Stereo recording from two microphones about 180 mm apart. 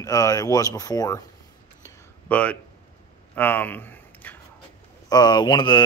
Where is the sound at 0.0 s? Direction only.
20° left (ahead or behind).